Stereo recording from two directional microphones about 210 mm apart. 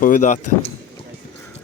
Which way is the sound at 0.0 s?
35° left (ahead or behind).